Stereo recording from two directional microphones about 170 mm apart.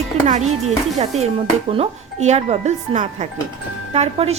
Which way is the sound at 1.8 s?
40° right (ahead or behind).